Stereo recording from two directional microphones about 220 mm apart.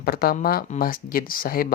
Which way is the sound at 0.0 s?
45° left (ahead or behind).